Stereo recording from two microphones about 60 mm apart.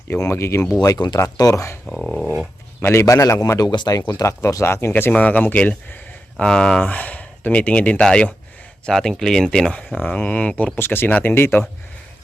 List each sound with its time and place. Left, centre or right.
0.2 s speech: left
0.8 s speech: left
1.4 s a man's voice: left
1.9 s dog: centre
2.8 s a man's voice: left
5.1 s speech: left
6.4 s speech: centre
6.8 s speech: left; by 9.7 s centre
10.0 s speech: left
10.8 s speech: left